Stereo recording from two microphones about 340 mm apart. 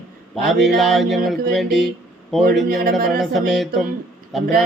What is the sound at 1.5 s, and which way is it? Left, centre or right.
Speech, centre.